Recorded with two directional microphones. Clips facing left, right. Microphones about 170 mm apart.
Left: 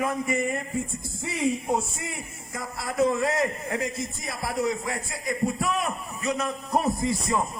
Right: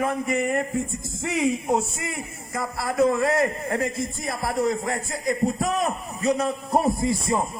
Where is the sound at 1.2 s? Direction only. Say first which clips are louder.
Right 3 dB; 90° right.